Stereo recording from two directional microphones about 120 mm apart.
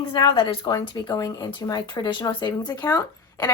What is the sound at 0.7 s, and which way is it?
A woman's voice, 30° left (ahead or behind).